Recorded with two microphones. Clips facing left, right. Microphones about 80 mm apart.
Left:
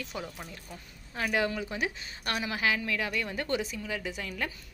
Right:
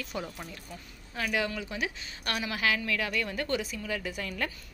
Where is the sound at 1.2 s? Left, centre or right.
Left.